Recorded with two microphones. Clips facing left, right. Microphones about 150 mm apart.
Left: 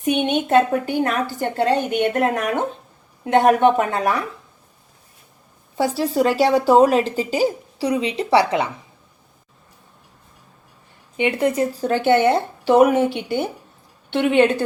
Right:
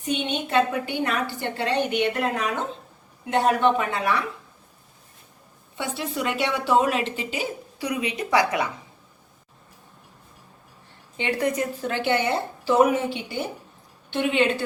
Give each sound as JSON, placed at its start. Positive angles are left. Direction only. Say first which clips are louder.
{"t": 0.0, "sound": "a woman's voice", "louder": "left 7 dB", "side_deg": 60}
{"t": 5.7, "sound": "a woman's voice", "louder": "left 10 dB", "side_deg": 35}
{"t": 11.2, "sound": "a woman's voice", "louder": "left 6 dB", "side_deg": 20}